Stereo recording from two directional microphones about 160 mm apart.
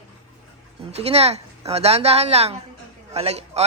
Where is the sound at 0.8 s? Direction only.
40° right (ahead or behind).